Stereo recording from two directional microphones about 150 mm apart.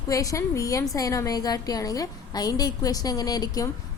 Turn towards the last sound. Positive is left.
turn(degrees=25)  # may be behind; listen again after turning